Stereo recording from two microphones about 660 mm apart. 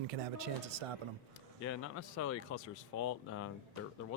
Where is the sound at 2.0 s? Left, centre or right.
Left.